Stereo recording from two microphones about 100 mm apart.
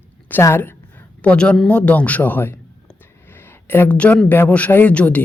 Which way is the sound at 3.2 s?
20° left (ahead or behind).